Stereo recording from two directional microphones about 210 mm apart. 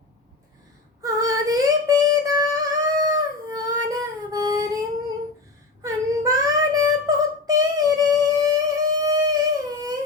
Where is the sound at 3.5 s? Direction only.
20° right (ahead or behind).